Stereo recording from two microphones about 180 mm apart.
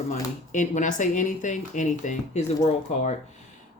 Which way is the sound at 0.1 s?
40° left (ahead or behind).